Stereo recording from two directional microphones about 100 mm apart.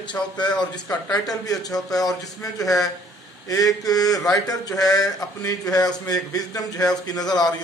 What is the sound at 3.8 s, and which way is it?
A man's voice, 40° left (ahead or behind).